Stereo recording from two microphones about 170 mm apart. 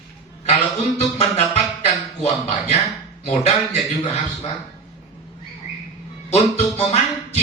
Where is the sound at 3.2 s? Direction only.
40° left (ahead or behind).